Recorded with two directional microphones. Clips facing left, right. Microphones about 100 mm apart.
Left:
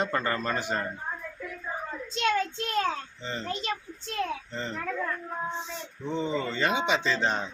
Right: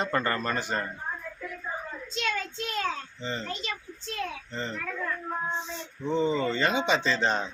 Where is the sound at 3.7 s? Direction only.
30° left (ahead or behind).